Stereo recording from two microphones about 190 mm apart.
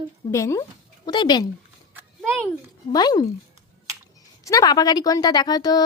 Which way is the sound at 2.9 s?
20° left (ahead or behind).